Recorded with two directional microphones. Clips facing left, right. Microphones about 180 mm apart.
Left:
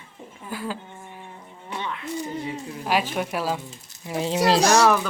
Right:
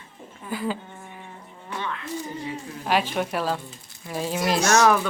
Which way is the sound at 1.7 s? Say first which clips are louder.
Even; 20° left (ahead or behind).